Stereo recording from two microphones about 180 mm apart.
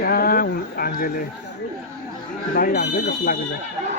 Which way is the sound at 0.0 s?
55° left (ahead or behind).